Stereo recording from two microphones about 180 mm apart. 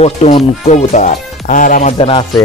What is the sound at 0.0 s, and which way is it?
Speech, 35° left (ahead or behind).